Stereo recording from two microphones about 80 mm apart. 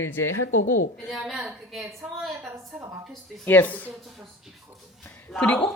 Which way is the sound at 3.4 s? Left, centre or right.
Left.